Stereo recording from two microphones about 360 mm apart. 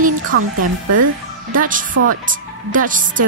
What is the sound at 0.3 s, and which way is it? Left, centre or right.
Speech, right.